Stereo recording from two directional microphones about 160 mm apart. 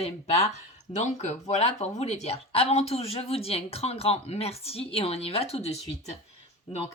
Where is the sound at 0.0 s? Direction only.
40° left (ahead or behind).